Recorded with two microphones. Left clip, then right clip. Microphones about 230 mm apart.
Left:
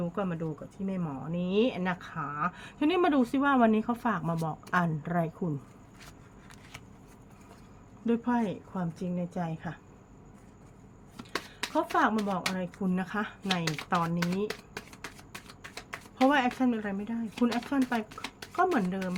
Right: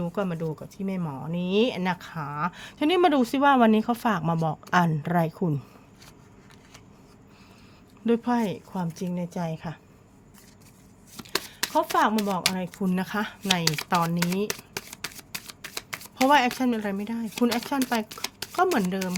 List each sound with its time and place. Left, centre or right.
0.0 s speech: right
8.0 s speech: right
11.2 s speech: right